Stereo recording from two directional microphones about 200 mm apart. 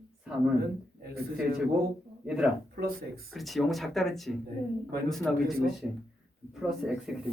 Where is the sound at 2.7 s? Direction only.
50° right (ahead or behind).